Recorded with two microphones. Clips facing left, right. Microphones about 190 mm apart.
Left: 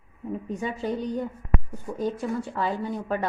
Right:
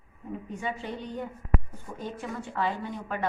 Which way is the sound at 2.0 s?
35° left (ahead or behind).